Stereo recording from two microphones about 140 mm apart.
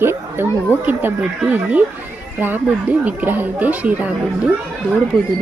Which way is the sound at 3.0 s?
10° right (ahead or behind).